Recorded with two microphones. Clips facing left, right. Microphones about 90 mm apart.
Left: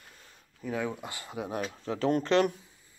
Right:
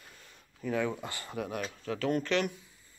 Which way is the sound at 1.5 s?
30° left (ahead or behind).